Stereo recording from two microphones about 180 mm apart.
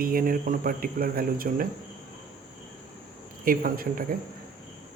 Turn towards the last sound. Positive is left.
turn(degrees=-50)  # may be behind; listen again after turning